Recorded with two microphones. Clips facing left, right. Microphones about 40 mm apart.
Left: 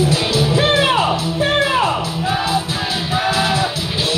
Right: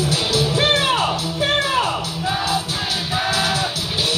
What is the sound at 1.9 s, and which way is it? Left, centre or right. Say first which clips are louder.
Music: left 3 dB; centre.